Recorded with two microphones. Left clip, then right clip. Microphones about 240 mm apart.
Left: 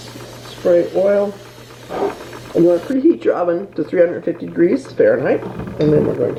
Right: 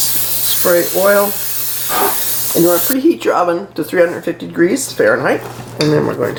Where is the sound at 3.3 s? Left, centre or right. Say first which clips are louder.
Right 4 dB; right.